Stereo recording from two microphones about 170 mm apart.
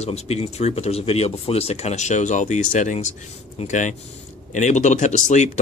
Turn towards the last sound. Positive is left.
turn(degrees=45)  # may be behind; listen again after turning